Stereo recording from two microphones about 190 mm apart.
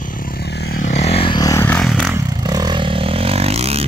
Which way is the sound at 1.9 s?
5° right (ahead or behind).